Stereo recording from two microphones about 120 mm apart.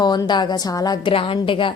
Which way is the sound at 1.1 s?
45° left (ahead or behind).